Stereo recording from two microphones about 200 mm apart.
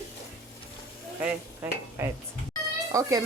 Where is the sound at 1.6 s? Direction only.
10° right (ahead or behind).